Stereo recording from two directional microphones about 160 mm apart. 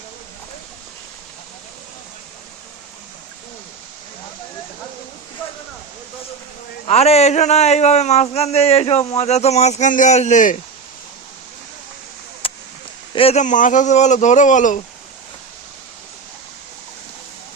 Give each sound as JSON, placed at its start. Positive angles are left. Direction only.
{"t": 6.8, "sound": "a man's voice", "side_deg": 40}
{"t": 12.4, "sound": "a sound", "side_deg": 35}
{"t": 13.1, "sound": "a man's voice", "side_deg": 40}